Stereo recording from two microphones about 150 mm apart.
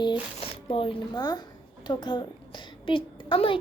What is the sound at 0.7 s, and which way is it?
A woman's voice, 30° left (ahead or behind).